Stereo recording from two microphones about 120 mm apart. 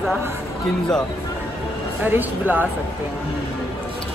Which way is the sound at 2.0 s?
15° right (ahead or behind).